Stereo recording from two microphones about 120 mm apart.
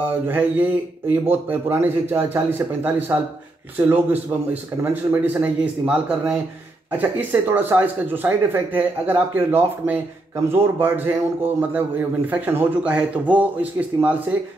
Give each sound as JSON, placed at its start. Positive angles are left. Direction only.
{"t": 0.0, "sound": "speech", "side_deg": -15}